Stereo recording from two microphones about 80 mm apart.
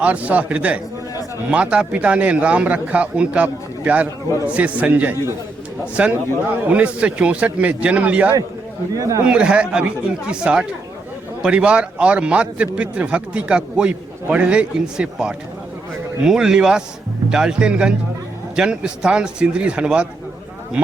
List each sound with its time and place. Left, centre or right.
0.0 s a man's voice: centre
9.0 s speech: right
9.2 s a man's voice: centre